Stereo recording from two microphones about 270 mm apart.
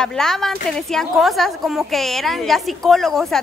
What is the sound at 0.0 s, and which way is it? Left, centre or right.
A woman's voice, centre.